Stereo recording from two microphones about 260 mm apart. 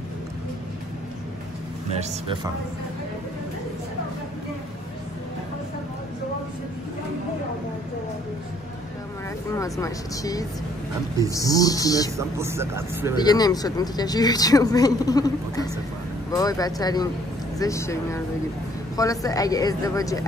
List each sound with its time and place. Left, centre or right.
2.0 s speech: centre
9.5 s speech: centre
12.2 s a man's voice: centre
13.2 s speech: centre